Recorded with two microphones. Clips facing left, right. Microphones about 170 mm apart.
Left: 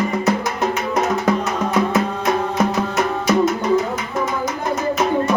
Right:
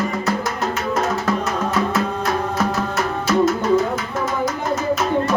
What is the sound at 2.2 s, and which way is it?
Music, 15° left (ahead or behind).